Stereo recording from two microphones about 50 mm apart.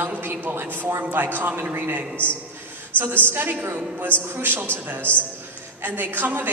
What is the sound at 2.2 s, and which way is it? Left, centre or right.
Speech, left.